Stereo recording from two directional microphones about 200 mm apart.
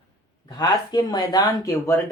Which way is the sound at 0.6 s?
20° left (ahead or behind).